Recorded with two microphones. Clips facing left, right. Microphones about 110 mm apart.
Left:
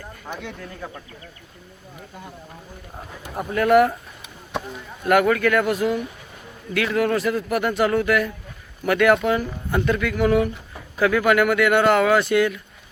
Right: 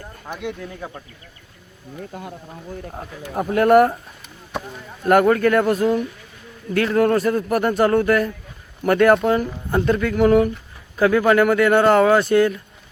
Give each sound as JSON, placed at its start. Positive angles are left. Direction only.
{"t": 0.3, "sound": "speech", "side_deg": -10}
{"t": 3.5, "sound": "speech", "side_deg": -40}
{"t": 5.3, "sound": "a man's voice", "side_deg": -35}